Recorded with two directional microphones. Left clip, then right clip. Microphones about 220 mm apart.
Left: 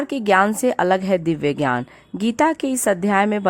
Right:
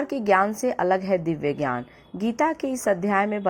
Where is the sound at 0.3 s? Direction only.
30° left (ahead or behind).